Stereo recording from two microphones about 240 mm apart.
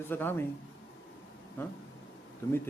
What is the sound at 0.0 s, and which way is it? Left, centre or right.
Speech, centre.